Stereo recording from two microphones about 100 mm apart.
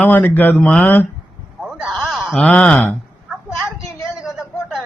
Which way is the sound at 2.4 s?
15° left (ahead or behind).